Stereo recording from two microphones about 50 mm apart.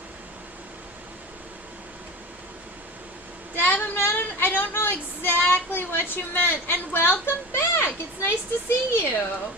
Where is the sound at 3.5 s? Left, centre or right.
Left.